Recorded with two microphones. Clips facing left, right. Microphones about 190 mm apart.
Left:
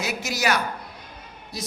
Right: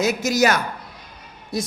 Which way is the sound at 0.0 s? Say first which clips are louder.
Right 8 dB; 45° right (ahead or behind).